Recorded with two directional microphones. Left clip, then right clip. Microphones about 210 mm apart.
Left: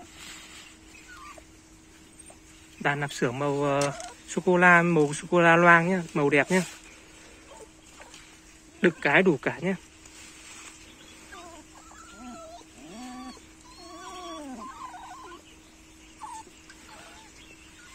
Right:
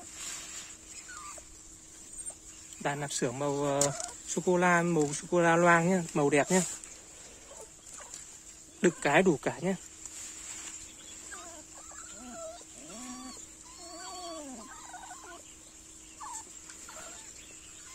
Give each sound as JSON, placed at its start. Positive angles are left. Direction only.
{"t": 0.2, "sound": "boat", "side_deg": -40}
{"t": 2.8, "sound": "speech", "side_deg": -10}
{"t": 8.8, "sound": "speech", "side_deg": -20}